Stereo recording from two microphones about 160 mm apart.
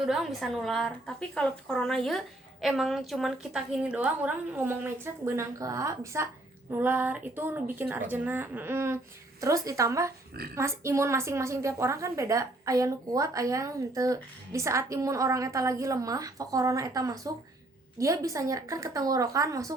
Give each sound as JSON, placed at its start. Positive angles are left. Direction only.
{"t": 0.0, "sound": "a woman's voice", "side_deg": -5}